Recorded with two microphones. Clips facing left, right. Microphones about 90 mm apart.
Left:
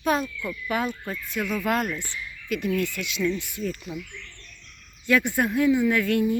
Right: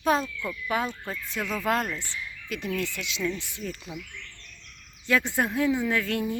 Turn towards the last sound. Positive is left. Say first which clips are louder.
# left 5 dB
turn(degrees=-30)  # may be behind; listen again after turning